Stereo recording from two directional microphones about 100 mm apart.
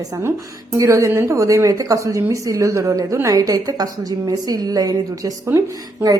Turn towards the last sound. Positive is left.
turn(degrees=-20)  # may be behind; listen again after turning